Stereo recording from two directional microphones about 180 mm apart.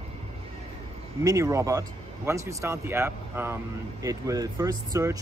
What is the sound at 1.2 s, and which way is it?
Speech, 20° right (ahead or behind).